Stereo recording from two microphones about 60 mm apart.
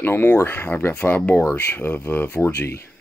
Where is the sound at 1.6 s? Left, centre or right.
Left.